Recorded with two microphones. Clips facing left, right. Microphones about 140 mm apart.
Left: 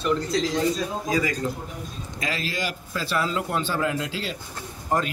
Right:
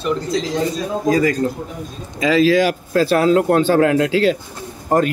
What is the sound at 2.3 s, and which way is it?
A man's voice, 90° right.